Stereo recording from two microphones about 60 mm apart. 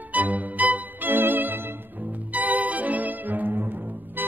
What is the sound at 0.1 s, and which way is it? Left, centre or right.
Music, right.